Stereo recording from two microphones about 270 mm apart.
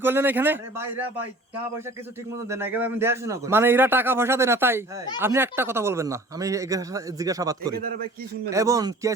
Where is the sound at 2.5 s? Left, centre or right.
Centre.